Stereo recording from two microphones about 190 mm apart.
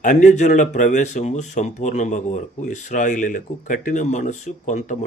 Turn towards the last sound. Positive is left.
turn(degrees=40)  # may be behind; listen again after turning